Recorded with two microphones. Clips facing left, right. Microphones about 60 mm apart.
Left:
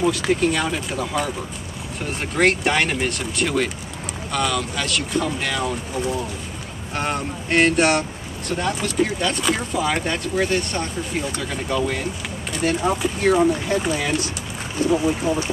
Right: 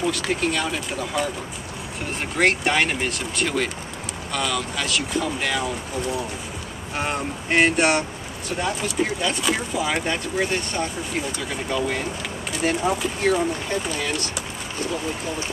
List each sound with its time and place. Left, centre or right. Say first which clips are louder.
0.0 s speech: left 4 dB; centre
13.0 s speech: left 4 dB; centre
14.9 s speech: left 9 dB; left